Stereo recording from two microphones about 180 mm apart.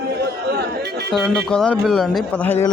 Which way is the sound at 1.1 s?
5° left (ahead or behind).